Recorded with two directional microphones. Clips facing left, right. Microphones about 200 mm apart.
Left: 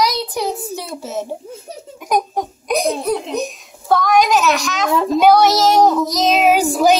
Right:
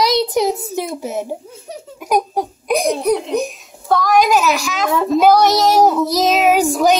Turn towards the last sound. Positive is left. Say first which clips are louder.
# even
turn(degrees=0)  # may be behind; listen again after turning